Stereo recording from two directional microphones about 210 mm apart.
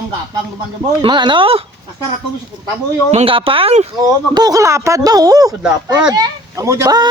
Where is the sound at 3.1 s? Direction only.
25° right (ahead or behind).